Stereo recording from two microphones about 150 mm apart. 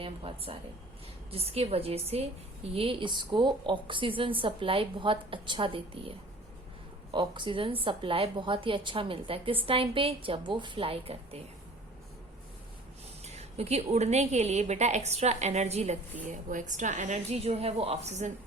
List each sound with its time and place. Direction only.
0.0 s a woman's voice: 35° right (ahead or behind)
13.2 s a woman's voice: 45° right (ahead or behind)
16.3 s a woman's voice: 60° right (ahead or behind)